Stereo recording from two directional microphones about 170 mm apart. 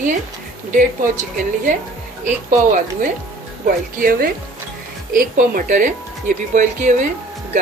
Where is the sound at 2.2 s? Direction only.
50° right (ahead or behind).